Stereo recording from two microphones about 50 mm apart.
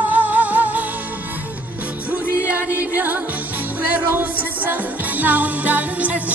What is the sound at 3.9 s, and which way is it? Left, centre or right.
Music, right.